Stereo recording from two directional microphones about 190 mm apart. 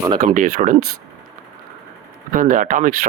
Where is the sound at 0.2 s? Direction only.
40° right (ahead or behind).